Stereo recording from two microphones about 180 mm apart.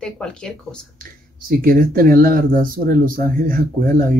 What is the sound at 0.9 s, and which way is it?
Speech, 50° right (ahead or behind).